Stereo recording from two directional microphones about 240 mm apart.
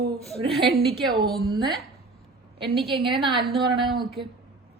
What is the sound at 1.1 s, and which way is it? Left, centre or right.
Humming, right.